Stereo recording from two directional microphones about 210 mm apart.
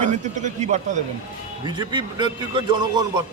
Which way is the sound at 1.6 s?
20° right (ahead or behind).